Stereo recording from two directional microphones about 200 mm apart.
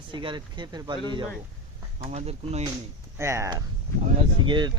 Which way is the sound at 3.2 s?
15° right (ahead or behind).